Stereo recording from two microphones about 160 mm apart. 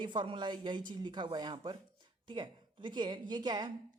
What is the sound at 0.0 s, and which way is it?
Speech, 30° right (ahead or behind).